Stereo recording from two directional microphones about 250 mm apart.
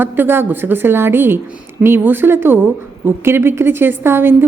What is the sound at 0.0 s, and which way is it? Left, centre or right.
A woman's voice, centre.